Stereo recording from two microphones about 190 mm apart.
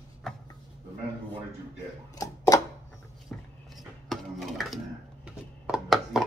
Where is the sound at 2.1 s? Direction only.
20° left (ahead or behind).